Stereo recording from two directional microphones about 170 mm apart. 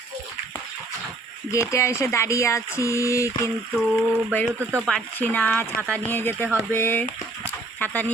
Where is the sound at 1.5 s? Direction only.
15° left (ahead or behind).